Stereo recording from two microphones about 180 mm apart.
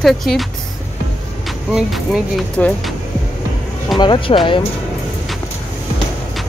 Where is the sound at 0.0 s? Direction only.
Centre (ahead or behind).